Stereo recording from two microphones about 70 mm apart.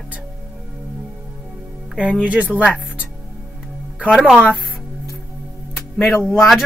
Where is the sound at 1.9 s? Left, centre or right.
Centre.